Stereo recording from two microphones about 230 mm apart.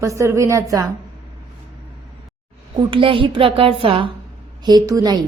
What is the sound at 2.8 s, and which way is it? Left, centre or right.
A woman's voice, right.